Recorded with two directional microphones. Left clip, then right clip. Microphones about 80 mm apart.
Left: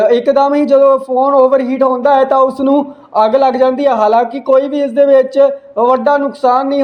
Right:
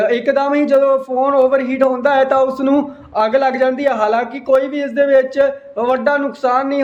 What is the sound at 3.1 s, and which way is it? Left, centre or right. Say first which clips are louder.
Speech: left 4 dB; left.